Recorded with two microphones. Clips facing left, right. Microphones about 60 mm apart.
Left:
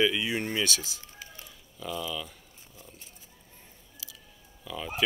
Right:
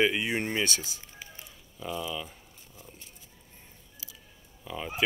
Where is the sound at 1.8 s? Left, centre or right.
Centre.